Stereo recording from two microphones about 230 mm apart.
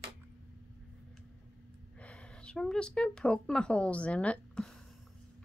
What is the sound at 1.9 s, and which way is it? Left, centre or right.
Speech, centre.